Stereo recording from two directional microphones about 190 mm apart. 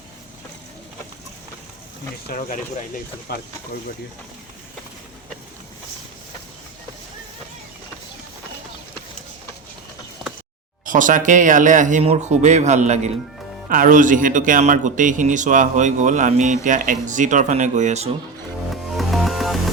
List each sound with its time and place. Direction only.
2.3 s speech: 50° left (ahead or behind)
10.8 s speech: 45° right (ahead or behind)
18.7 s music: centre (ahead or behind)